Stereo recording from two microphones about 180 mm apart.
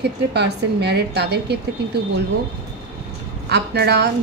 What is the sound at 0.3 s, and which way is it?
A woman's voice, 65° right (ahead or behind).